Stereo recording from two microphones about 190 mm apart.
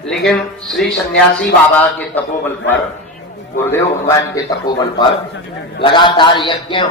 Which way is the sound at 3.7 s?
15° left (ahead or behind).